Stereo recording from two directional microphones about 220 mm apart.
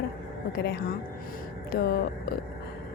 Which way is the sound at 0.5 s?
45° left (ahead or behind).